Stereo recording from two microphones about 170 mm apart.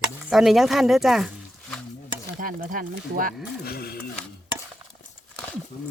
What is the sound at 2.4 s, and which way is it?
Speech, 55° right (ahead or behind).